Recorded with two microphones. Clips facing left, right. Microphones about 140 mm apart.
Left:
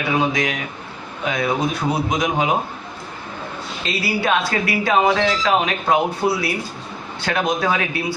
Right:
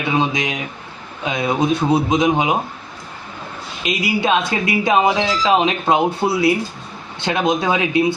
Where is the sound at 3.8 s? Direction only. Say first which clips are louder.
Right 3 dB; 15° right (ahead or behind).